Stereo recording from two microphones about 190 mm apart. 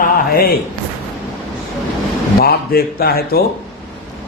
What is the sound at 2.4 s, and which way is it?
A man's voice, 55° left (ahead or behind).